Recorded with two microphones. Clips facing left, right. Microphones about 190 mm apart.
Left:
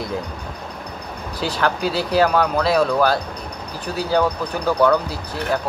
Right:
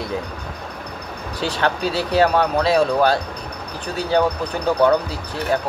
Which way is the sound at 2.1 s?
25° right (ahead or behind).